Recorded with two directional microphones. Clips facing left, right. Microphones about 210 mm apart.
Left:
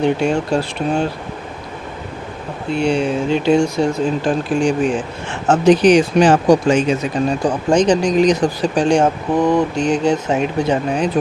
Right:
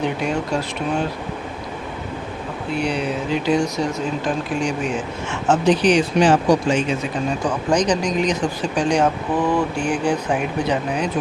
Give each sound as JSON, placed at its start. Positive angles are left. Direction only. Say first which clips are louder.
{"t": 0.0, "sound": "speech", "louder": "left 6 dB", "side_deg": 30}
{"t": 2.7, "sound": "speech", "louder": "left 6 dB", "side_deg": 30}
{"t": 7.7, "sound": "speech", "louder": "left 5 dB", "side_deg": 25}